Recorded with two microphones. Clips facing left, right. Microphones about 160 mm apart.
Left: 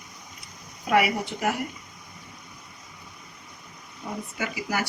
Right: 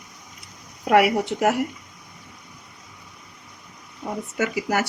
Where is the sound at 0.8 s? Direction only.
70° right (ahead or behind).